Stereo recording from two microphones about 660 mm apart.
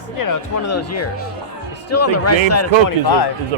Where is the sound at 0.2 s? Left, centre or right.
Left.